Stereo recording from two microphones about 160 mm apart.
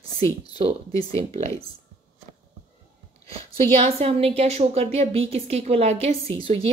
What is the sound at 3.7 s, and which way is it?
A woman's voice, 40° right (ahead or behind).